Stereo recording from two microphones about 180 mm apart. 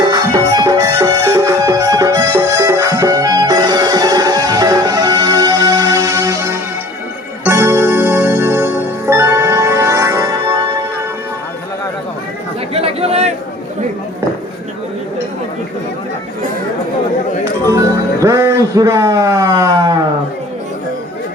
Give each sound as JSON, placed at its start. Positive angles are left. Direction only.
{"t": 0.0, "sound": "music", "side_deg": -20}
{"t": 12.7, "sound": "chatter", "side_deg": -35}
{"t": 18.2, "sound": "a sound", "side_deg": -15}